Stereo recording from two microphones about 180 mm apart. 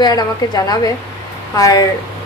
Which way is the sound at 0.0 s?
20° left (ahead or behind).